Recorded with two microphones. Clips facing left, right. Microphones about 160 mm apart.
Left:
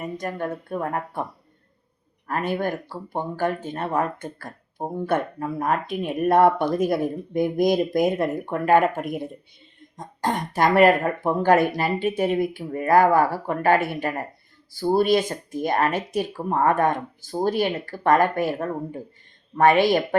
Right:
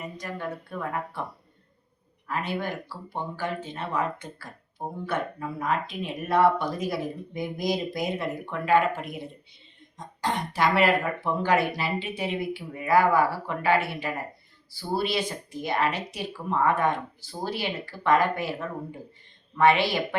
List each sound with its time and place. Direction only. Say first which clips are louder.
0.0 s speech: left 6 dB; 50° left (ahead or behind)
2.2 s speech: left 5 dB; 50° left (ahead or behind)